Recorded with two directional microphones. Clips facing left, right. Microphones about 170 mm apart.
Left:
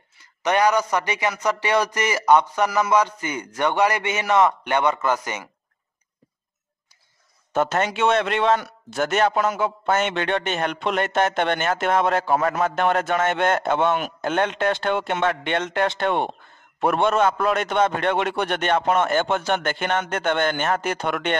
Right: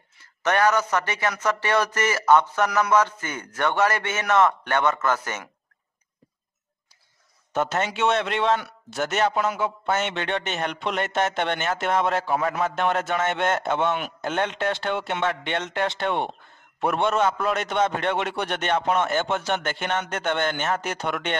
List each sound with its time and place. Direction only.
0.4 s a man's voice: 15° left (ahead or behind)
7.5 s a man's voice: 50° left (ahead or behind)